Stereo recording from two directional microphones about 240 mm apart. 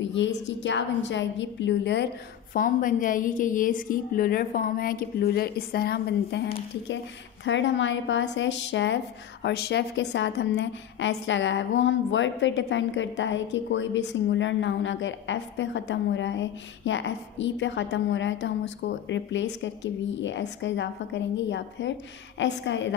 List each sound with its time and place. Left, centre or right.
0.0 s speech: left
2.5 s a woman's voice: left